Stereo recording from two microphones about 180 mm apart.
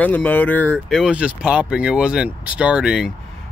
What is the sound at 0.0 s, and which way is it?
Speech, 10° left (ahead or behind).